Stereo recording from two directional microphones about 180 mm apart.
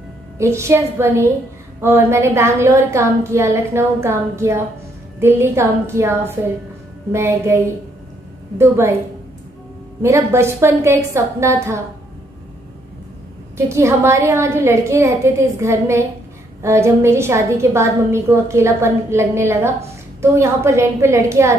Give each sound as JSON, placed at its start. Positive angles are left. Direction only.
{"t": 0.4, "sound": "a woman's voice", "side_deg": -15}
{"t": 10.0, "sound": "a woman's voice", "side_deg": -15}
{"t": 13.7, "sound": "a woman's voice", "side_deg": -15}